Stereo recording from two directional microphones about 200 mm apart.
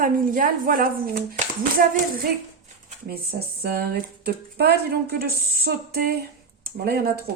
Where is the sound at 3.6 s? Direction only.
50° right (ahead or behind).